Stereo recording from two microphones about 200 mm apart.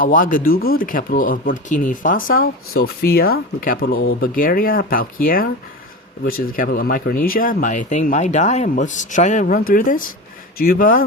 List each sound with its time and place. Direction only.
0.0 s speech: 45° left (ahead or behind)